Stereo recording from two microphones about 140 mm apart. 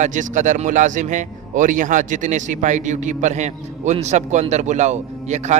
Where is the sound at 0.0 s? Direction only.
60° right (ahead or behind).